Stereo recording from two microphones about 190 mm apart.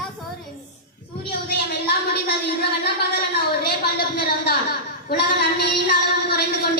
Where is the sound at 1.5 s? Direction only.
60° left (ahead or behind).